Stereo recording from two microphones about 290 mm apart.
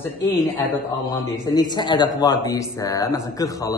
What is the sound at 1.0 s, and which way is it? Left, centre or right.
A man's voice, centre.